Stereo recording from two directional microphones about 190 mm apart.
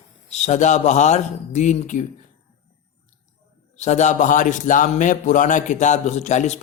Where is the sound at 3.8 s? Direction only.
40° left (ahead or behind).